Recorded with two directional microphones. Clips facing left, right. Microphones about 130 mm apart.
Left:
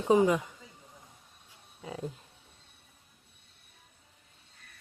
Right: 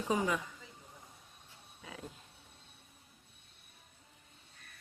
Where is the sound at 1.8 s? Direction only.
30° left (ahead or behind).